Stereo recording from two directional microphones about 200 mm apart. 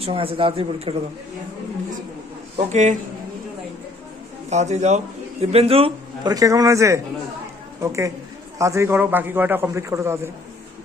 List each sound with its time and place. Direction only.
0.0 s a man's voice: 25° right (ahead or behind)
2.6 s speech: 35° right (ahead or behind)
4.4 s a man's voice: 35° right (ahead or behind); by 10.3 s 15° right (ahead or behind)